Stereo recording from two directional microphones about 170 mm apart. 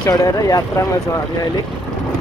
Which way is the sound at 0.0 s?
20° left (ahead or behind).